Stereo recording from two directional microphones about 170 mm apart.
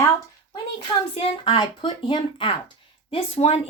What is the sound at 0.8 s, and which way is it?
Speech, 35° left (ahead or behind).